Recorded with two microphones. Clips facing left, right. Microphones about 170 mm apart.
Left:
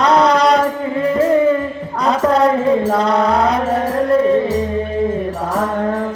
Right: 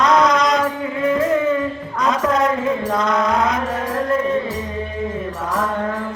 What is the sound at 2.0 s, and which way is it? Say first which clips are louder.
Chant: left 4 dB; 35° left (ahead or behind).